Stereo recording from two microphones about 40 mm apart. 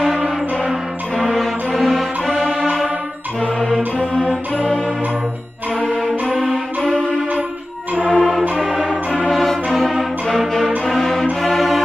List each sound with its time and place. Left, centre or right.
1.1 s music: centre
2.3 s music: right
3.3 s music: left
4.0 s music: left
6.4 s music: centre
8.1 s music: centre
8.6 s music: centre
9.4 s music: centre
10.9 s music: centre